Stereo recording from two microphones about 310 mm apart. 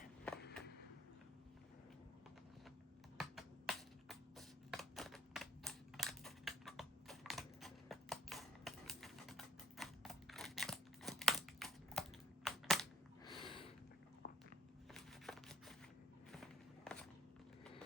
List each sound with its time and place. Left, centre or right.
3.2 s a sound: centre
12.5 s crushing: centre
13.4 s a sound: centre
14.2 s walk: left
14.9 s shuffling cards: centre
16.3 s walk: centre